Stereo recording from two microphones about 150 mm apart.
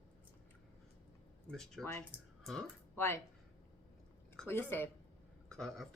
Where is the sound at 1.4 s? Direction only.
5° left (ahead or behind).